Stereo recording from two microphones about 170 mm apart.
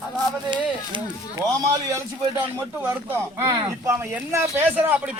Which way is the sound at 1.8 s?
15° right (ahead or behind).